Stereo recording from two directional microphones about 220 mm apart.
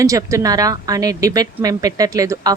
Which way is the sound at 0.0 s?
15° right (ahead or behind).